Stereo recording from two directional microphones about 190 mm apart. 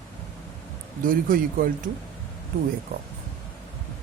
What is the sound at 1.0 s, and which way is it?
Speech, 45° right (ahead or behind).